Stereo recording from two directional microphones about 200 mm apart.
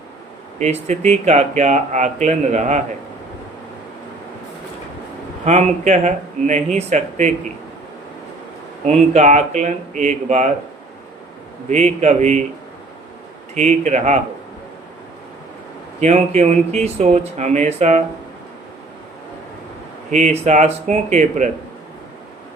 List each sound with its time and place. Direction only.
0.6 s speech: 35° right (ahead or behind)
5.5 s speech: 35° right (ahead or behind)
8.9 s speech: 35° right (ahead or behind)
11.7 s speech: 35° right (ahead or behind)
13.5 s speech: 35° right (ahead or behind)
16.0 s speech: 35° right (ahead or behind)
20.1 s speech: 35° right (ahead or behind)